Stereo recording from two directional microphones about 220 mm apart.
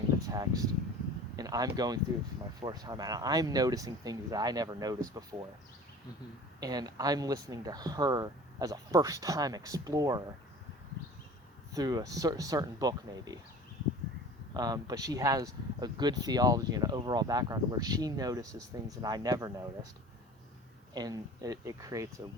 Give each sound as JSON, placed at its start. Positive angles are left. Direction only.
{"t": 0.2, "sound": "speech", "side_deg": -15}
{"t": 6.6, "sound": "speech", "side_deg": -15}
{"t": 11.7, "sound": "speech", "side_deg": -20}
{"t": 14.5, "sound": "speech", "side_deg": -15}
{"t": 20.9, "sound": "speech", "side_deg": -15}